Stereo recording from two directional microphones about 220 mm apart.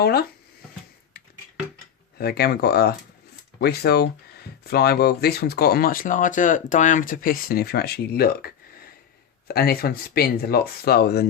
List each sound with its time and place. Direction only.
0.0 s speech: 45° left (ahead or behind)
1.2 s a sound: 45° left (ahead or behind)
2.1 s speech: 45° left (ahead or behind)